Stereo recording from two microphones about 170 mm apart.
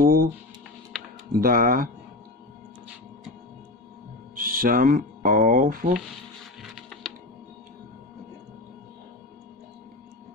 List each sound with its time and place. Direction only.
0.0 s music: 60° right (ahead or behind)
1.3 s speech: 60° right (ahead or behind)
4.4 s speech: 55° right (ahead or behind)
6.9 s computer keyboard: 5° left (ahead or behind)